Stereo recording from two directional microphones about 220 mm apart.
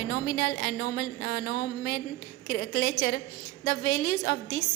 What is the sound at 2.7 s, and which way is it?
A woman's voice, 35° left (ahead or behind).